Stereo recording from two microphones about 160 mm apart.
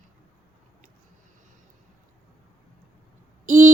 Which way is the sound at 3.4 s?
50° right (ahead or behind).